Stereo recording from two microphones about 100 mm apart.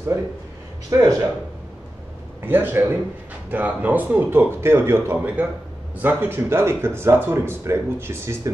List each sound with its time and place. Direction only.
0.8 s speech: 40° right (ahead or behind)
2.4 s speech: 20° right (ahead or behind)